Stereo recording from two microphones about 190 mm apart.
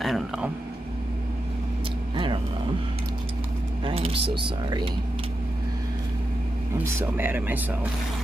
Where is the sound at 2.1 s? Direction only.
25° right (ahead or behind).